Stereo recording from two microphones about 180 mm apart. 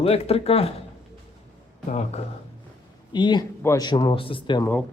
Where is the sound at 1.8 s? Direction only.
35° left (ahead or behind).